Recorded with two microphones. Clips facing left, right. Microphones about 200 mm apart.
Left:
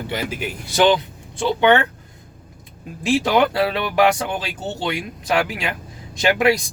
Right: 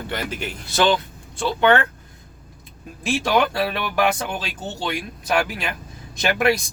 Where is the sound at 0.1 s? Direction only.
10° left (ahead or behind).